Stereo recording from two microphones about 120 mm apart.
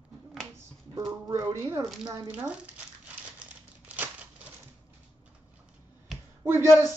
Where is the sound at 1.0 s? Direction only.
30° right (ahead or behind).